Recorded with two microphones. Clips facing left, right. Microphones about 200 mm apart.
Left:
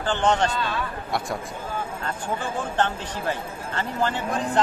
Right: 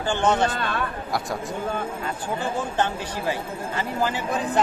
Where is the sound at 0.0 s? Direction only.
10° right (ahead or behind).